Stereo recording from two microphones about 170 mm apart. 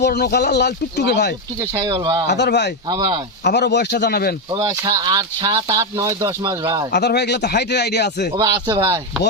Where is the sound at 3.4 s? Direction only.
80° left.